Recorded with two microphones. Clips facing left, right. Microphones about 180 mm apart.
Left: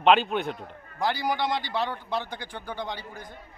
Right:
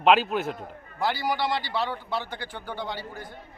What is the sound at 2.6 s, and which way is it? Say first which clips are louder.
Speech: right 1 dB; 15° left (ahead or behind).